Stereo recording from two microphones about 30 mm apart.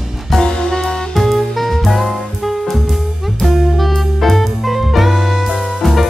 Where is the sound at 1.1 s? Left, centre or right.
Centre.